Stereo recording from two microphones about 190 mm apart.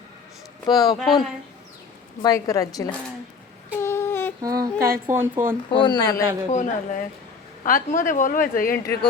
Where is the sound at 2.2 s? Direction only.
20° left (ahead or behind).